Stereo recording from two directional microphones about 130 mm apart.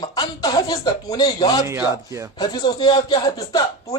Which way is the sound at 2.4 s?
35° left (ahead or behind).